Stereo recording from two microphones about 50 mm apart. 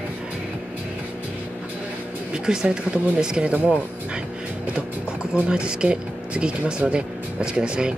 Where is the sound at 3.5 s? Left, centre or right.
Right.